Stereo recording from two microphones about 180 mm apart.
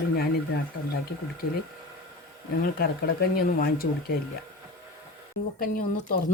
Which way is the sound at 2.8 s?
55° left (ahead or behind).